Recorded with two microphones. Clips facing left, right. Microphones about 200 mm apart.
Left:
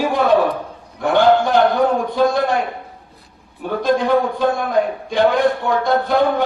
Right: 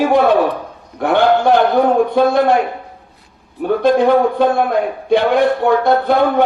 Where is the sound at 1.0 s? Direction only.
60° right (ahead or behind).